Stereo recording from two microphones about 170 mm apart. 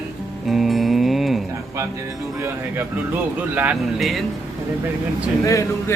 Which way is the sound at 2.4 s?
15° right (ahead or behind).